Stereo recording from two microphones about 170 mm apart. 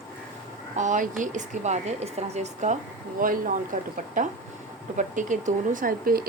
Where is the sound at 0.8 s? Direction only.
45° right (ahead or behind).